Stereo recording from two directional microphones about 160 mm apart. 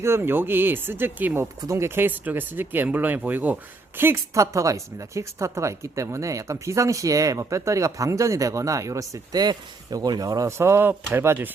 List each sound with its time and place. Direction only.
0.0 s speech: 15° right (ahead or behind)